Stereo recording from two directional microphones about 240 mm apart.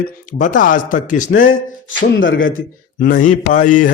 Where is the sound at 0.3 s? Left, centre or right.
Left.